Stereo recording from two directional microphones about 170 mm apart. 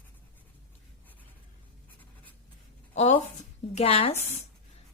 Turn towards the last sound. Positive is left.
turn(degrees=35)  # may be behind; listen again after turning